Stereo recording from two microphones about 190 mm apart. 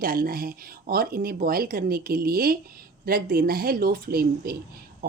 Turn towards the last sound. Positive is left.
turn(degrees=-50)  # may be behind; listen again after turning